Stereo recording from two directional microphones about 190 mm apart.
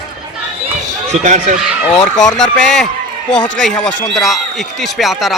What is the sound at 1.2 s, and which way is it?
Speech, 40° right (ahead or behind).